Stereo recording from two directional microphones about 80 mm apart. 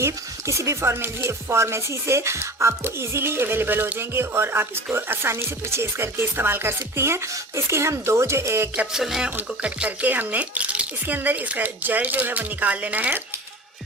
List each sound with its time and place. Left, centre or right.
0.0 s speech: right
8.7 s music: centre
9.6 s speech: centre